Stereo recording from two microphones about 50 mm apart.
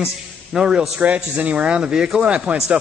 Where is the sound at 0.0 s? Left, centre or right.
Centre.